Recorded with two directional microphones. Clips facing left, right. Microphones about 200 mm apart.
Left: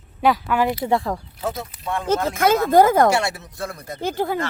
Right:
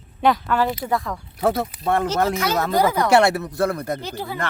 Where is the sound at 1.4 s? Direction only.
60° right (ahead or behind).